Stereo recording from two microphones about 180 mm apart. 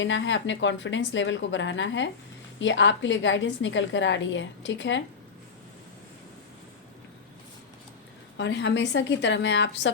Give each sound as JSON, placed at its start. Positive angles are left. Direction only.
{"t": 0.0, "sound": "a woman's voice", "side_deg": 90}
{"t": 8.4, "sound": "a woman's voice", "side_deg": 85}